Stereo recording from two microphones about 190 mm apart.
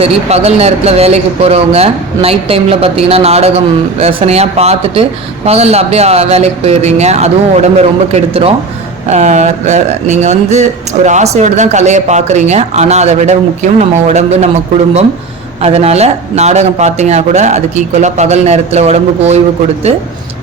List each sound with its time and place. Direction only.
0.0 s speech: 35° right (ahead or behind)
15.6 s speech: 35° right (ahead or behind)